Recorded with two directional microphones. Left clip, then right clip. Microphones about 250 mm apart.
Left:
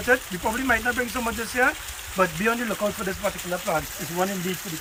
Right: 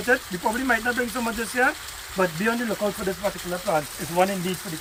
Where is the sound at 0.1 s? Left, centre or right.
Centre.